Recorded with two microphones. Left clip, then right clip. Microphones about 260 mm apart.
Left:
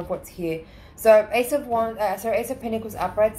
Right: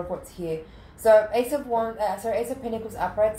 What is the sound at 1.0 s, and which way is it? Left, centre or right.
Speech, left.